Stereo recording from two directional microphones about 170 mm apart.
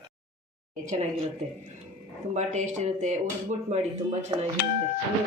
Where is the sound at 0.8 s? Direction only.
45° right (ahead or behind).